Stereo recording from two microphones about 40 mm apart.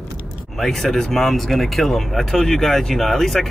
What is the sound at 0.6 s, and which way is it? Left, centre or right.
Speech, centre.